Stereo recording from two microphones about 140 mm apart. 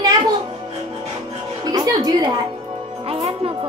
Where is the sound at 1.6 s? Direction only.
25° right (ahead or behind).